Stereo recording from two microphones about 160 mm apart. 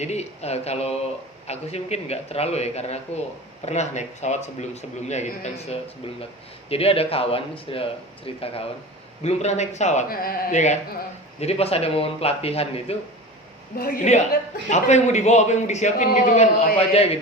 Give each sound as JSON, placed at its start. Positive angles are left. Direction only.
{"t": 0.0, "sound": "a man's voice", "side_deg": 45}
{"t": 10.1, "sound": "speech", "side_deg": 65}
{"t": 11.3, "sound": "speech", "side_deg": 40}
{"t": 13.7, "sound": "speech", "side_deg": 65}
{"t": 14.7, "sound": "a man's voice", "side_deg": 45}